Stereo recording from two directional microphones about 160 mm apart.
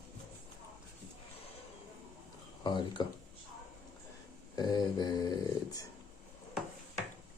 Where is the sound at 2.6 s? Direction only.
25° left (ahead or behind).